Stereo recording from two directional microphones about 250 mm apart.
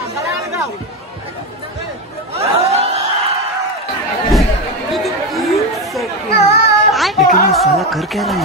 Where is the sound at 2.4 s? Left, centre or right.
Right.